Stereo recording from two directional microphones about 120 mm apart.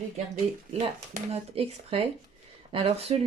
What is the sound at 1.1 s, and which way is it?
Speech, 60° right (ahead or behind).